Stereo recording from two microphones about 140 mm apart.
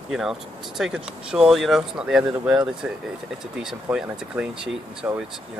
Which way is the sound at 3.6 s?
5° right (ahead or behind).